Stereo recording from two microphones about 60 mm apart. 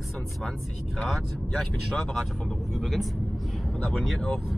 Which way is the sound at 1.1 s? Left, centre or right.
Centre.